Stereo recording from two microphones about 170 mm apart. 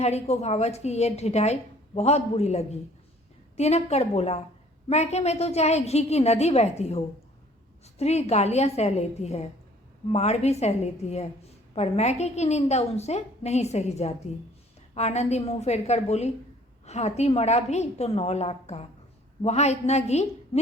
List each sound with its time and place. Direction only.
0.0 s a woman's voice: 40° left (ahead or behind)